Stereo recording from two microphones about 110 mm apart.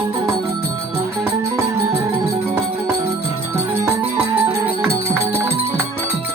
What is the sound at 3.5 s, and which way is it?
Music, 20° right (ahead or behind).